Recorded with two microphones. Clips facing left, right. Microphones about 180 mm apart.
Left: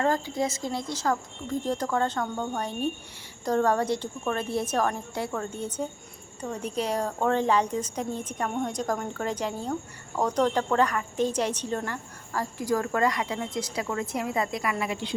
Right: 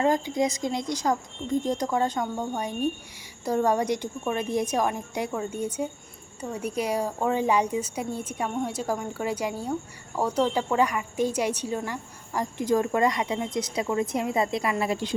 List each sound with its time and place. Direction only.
0.0 s a woman's voice: 15° right (ahead or behind); by 15.1 s 40° right (ahead or behind)